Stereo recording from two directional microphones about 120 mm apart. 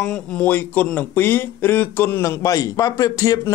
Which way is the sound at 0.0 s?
10° left (ahead or behind).